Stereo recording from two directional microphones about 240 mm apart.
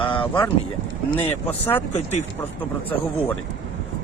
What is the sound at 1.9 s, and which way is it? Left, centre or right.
Speech, left.